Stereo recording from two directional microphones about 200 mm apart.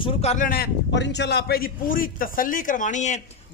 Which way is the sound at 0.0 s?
30° left (ahead or behind).